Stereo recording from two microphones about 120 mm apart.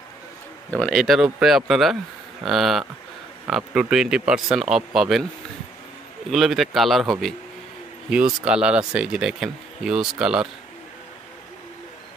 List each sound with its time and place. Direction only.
0.7 s speech: 10° left (ahead or behind)
0.9 s speech: centre (ahead or behind)
6.3 s speech: centre (ahead or behind)